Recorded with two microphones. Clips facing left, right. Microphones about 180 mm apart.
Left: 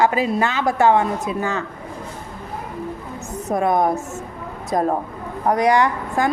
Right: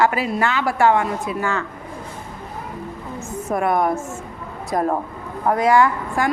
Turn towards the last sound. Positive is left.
turn(degrees=20)  # may be behind; listen again after turning